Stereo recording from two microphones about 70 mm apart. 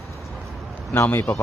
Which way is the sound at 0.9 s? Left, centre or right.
Left.